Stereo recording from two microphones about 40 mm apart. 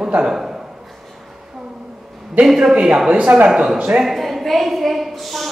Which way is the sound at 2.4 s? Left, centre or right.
Centre.